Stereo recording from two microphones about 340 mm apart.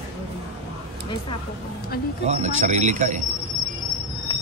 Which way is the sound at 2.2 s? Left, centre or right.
Right.